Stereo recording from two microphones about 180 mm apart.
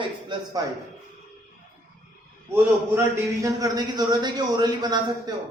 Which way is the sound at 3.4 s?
20° right (ahead or behind).